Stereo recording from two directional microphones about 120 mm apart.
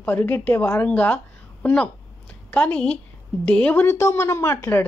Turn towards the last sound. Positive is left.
turn(degrees=20)  # may be behind; listen again after turning